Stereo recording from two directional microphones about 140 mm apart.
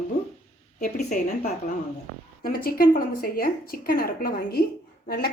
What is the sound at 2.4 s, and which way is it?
A woman's voice, 90° left.